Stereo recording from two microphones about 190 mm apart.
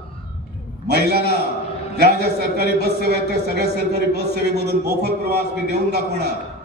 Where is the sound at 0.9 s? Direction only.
60° right (ahead or behind).